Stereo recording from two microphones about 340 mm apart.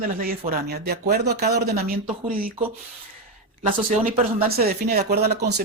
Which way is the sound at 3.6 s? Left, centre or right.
Right.